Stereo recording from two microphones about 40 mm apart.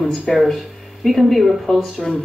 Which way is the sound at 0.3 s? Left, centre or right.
Centre.